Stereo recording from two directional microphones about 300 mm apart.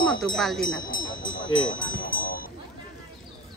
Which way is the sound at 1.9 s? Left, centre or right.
Left.